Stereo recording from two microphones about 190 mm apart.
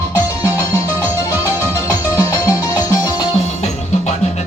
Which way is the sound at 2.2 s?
15° left (ahead or behind).